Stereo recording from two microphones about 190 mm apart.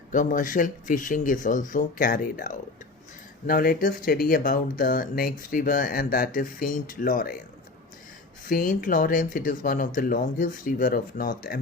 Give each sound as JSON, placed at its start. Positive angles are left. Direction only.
{"t": 0.1, "sound": "speech", "side_deg": 45}
{"t": 8.4, "sound": "speech", "side_deg": 50}